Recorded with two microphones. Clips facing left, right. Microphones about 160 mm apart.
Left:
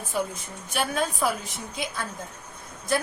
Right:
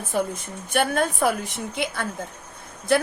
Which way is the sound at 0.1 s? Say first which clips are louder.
Right 4 dB; 55° right (ahead or behind).